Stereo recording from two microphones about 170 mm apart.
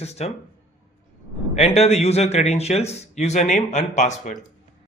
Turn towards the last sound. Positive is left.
turn(degrees=45)  # may be behind; listen again after turning